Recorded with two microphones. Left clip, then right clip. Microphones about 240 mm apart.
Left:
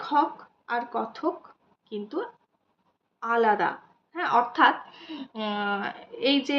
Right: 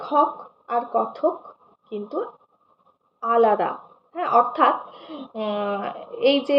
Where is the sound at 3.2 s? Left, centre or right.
Centre.